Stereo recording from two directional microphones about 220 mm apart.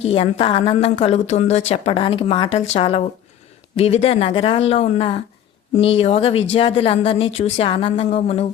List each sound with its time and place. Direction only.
0.0 s speech: 25° left (ahead or behind)